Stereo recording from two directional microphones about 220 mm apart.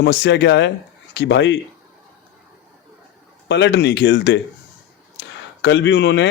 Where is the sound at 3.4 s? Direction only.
50° left (ahead or behind).